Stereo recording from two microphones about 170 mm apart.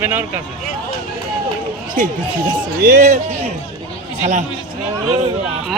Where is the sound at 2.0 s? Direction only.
50° right (ahead or behind).